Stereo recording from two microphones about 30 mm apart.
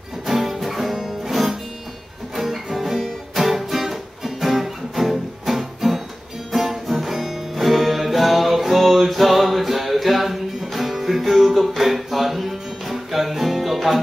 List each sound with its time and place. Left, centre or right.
0.3 s music: centre
0.9 s music: centre
2.3 s music: centre